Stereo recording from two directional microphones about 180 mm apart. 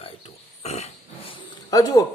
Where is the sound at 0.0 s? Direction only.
35° left (ahead or behind).